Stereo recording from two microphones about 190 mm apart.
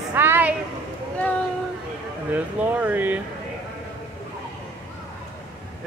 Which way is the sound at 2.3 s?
10° right (ahead or behind).